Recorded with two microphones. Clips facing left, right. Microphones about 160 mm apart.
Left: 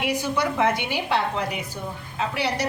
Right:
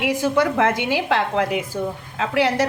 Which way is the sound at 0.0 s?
90° right.